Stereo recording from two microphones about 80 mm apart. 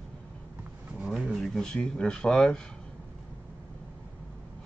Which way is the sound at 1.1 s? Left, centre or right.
Centre.